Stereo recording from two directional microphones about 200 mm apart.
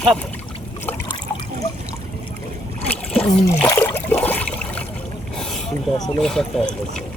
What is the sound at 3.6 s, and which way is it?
Water, 15° left (ahead or behind).